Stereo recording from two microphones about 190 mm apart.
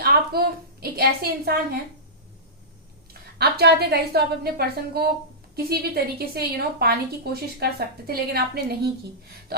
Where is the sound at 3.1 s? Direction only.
55° right (ahead or behind).